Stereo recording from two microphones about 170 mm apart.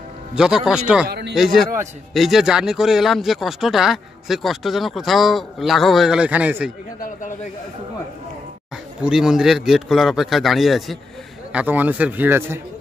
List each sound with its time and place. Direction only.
0.3 s speech: 5° right (ahead or behind)
1.0 s a man's voice: 70° right (ahead or behind)
1.3 s speech: centre (ahead or behind)
7.0 s a man's voice: 50° left (ahead or behind)
9.0 s a man's voice: 5° right (ahead or behind)